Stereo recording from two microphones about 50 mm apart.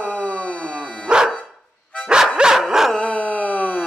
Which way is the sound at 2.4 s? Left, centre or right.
Centre.